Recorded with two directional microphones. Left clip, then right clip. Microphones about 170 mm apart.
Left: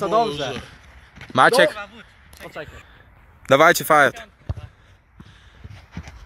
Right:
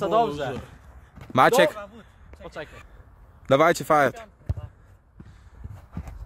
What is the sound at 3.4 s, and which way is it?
Speech, 5° right (ahead or behind).